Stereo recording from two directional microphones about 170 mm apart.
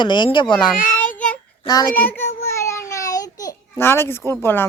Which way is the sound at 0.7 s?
55° left (ahead or behind).